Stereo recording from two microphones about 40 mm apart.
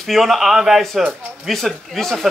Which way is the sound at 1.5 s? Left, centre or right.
Centre.